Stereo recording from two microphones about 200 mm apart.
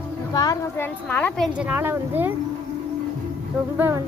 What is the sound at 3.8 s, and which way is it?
Speech, 10° right (ahead or behind).